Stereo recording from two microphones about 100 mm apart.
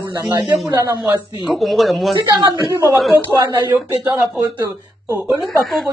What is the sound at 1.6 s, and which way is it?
Speech, centre (ahead or behind).